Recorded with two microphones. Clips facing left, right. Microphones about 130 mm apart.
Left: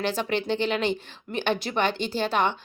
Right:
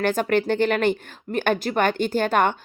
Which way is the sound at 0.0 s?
50° right (ahead or behind).